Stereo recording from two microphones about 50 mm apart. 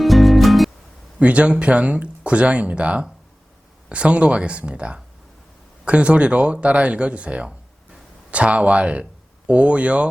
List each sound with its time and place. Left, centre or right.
0.0 s music: centre
1.2 s speech: right